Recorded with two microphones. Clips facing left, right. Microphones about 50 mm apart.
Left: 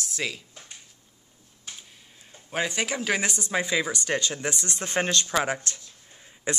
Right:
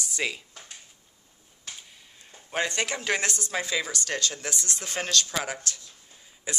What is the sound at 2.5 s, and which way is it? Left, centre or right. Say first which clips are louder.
Speech: left 1 dB; centre.